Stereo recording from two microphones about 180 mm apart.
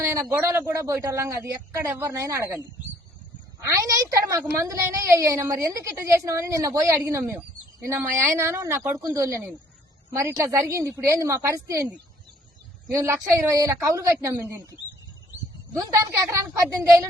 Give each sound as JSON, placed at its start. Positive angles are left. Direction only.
{"t": 0.0, "sound": "a woman's voice", "side_deg": -15}
{"t": 3.7, "sound": "a woman's voice", "side_deg": -20}
{"t": 15.9, "sound": "a woman's voice", "side_deg": -15}